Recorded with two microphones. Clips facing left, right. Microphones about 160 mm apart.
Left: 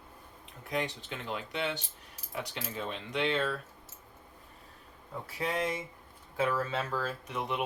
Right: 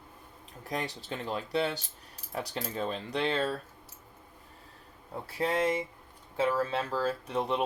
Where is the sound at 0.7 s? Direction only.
35° right (ahead or behind).